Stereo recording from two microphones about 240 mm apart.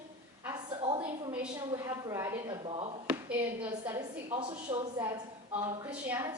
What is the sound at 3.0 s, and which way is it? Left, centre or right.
A man's voice, centre.